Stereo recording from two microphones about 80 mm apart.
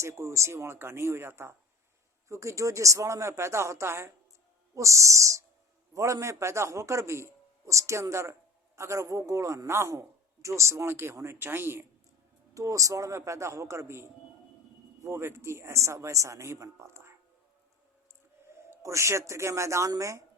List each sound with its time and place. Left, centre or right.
0.0 s a man's voice: right
12.5 s a man's voice: right
18.4 s a sound: right
18.7 s a man's voice: right